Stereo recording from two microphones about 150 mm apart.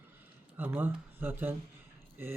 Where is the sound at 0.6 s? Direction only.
15° right (ahead or behind).